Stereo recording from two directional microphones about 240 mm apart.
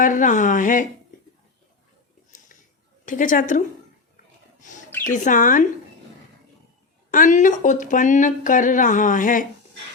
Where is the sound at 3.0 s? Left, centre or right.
Left.